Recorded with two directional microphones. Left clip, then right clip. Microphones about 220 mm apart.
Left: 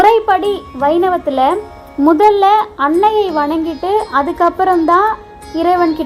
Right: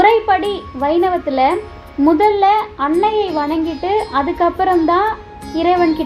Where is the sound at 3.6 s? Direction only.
Centre (ahead or behind).